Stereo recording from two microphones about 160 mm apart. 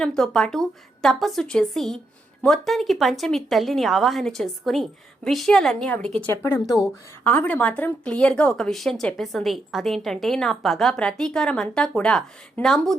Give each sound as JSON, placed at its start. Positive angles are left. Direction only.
{"t": 0.0, "sound": "speech", "side_deg": 5}
{"t": 6.3, "sound": "speech", "side_deg": 15}